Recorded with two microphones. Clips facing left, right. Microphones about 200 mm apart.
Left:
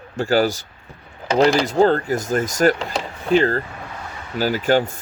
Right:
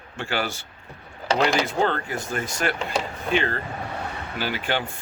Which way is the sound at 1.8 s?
40° left (ahead or behind).